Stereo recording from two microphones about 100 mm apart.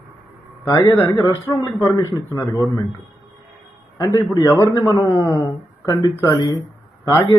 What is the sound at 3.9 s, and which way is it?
A man's voice, 35° left (ahead or behind).